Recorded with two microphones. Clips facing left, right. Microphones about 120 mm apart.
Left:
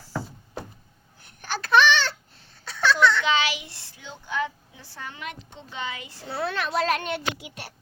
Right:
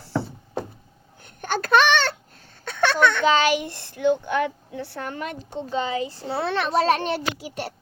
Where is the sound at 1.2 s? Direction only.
50° right (ahead or behind).